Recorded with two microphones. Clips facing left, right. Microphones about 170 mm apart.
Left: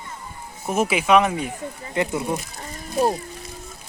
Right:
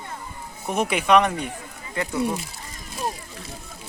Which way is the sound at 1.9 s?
20° left (ahead or behind).